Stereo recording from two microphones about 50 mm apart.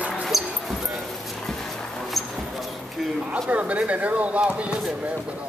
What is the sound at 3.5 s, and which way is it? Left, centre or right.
Speech, right.